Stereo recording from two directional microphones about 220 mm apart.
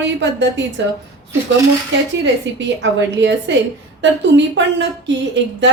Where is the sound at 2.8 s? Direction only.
55° right (ahead or behind).